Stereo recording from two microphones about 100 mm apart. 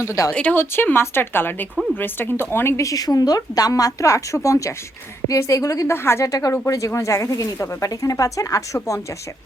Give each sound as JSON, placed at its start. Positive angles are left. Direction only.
{"t": 0.0, "sound": "a woman's voice", "side_deg": 30}